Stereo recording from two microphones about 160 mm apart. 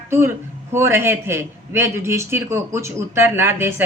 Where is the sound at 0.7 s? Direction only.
15° right (ahead or behind).